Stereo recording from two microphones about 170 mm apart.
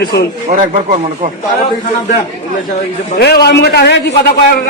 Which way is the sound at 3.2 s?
70° left (ahead or behind).